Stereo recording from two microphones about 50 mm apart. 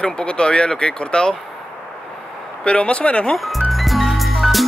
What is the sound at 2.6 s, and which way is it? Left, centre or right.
Speech, left.